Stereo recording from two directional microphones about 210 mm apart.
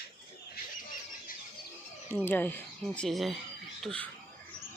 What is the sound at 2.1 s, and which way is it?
Speech, 10° left (ahead or behind).